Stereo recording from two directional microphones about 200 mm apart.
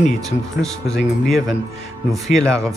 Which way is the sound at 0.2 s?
Centre (ahead or behind).